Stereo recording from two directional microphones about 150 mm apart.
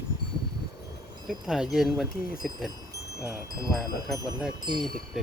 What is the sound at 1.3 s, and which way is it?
Speech, centre (ahead or behind).